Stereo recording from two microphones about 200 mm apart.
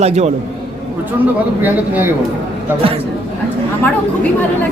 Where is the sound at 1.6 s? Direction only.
10° right (ahead or behind).